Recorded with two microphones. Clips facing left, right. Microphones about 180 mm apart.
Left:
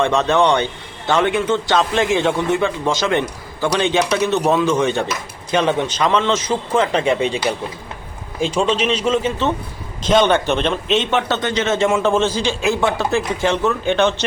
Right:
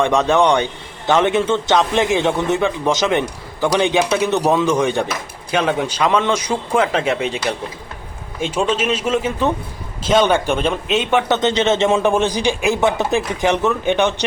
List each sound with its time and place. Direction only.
0.0 s a man's voice: 15° right (ahead or behind)
8.7 s a man's voice: 5° right (ahead or behind); by 12.0 s 25° right (ahead or behind)
12.0 s a man's voice: 15° right (ahead or behind)